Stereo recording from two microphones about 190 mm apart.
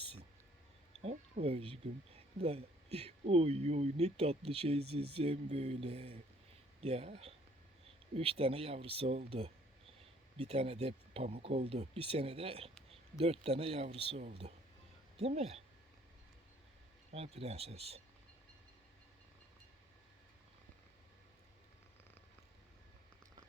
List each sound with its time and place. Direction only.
1.0 s speech: 30° right (ahead or behind)
17.1 s speech: 35° right (ahead or behind)